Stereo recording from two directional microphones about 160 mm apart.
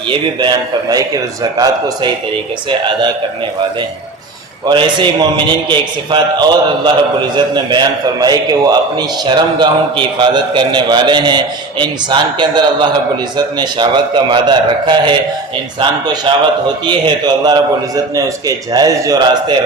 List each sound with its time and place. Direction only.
0.1 s a man's voice: 30° right (ahead or behind)
4.6 s a man's voice: 30° right (ahead or behind)